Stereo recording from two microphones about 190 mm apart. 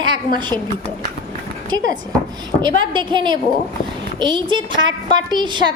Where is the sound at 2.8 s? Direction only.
25° right (ahead or behind).